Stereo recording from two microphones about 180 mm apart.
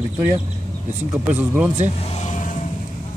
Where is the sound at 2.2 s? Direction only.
45° left (ahead or behind).